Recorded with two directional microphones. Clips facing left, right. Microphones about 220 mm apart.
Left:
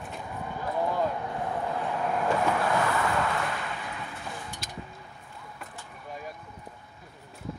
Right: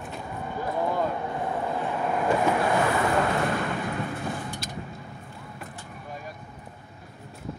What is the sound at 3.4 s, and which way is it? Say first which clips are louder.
Vehicle: right 7 dB; 50° right (ahead or behind).